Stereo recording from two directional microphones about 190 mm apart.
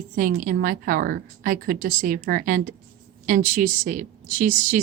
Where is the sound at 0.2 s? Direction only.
45° right (ahead or behind).